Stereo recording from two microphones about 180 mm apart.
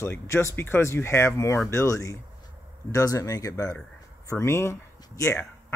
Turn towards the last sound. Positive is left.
turn(degrees=15)  # may be behind; listen again after turning